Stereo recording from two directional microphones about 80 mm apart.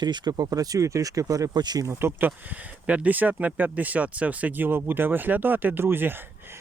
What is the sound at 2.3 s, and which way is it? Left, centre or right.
Speech, centre.